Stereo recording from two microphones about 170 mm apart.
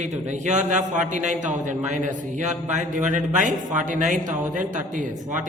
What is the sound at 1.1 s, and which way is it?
Speech, 45° right (ahead or behind).